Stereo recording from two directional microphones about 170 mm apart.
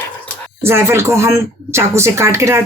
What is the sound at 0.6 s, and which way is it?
Speech, 15° right (ahead or behind).